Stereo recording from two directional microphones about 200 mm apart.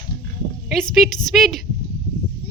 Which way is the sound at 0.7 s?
Centre (ahead or behind).